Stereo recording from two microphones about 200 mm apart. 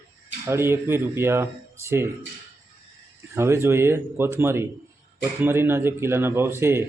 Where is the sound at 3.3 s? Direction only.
15° right (ahead or behind).